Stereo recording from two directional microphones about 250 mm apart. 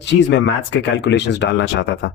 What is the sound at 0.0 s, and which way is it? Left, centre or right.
Speech, left.